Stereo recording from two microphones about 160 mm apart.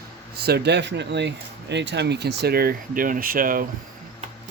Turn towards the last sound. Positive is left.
turn(degrees=-60)  # may be behind; listen again after turning